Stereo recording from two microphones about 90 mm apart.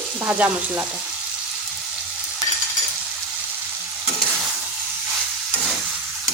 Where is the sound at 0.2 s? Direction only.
15° right (ahead or behind).